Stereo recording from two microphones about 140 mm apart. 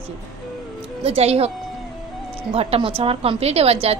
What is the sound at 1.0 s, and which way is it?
Speech, 45° right (ahead or behind).